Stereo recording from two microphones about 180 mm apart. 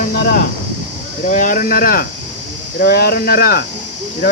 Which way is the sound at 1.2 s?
45° left (ahead or behind).